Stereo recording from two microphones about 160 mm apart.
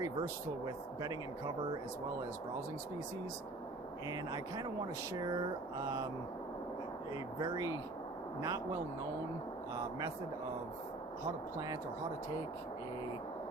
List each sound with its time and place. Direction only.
0.0 s speech: 25° right (ahead or behind)
4.1 s speech: 25° right (ahead or behind)
7.3 s speech: 25° right (ahead or behind)